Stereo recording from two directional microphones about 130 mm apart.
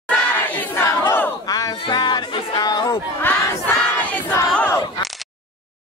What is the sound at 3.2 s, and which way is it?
Crowd, 15° left (ahead or behind).